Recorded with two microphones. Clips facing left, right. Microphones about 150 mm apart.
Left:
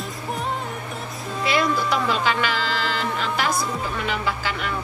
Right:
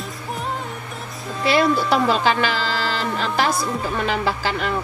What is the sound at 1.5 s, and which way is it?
Speech, 35° right (ahead or behind).